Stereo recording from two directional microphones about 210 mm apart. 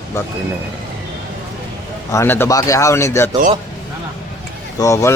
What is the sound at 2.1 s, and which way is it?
Speech, 10° left (ahead or behind).